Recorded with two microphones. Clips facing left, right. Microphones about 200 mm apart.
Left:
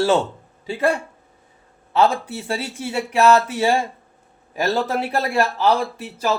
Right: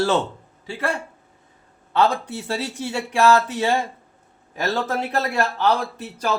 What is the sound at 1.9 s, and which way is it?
Speech, 5° left (ahead or behind).